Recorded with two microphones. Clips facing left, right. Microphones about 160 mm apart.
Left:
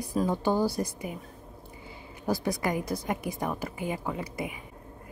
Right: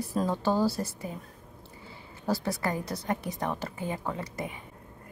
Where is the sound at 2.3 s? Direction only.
15° left (ahead or behind).